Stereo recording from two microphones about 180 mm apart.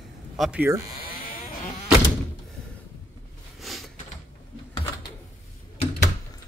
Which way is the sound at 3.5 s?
Centre (ahead or behind).